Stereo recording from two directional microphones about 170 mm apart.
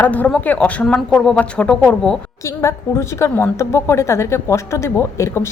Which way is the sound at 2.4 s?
15° left (ahead or behind).